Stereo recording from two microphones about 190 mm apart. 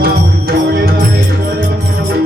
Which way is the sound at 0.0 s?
55° right (ahead or behind).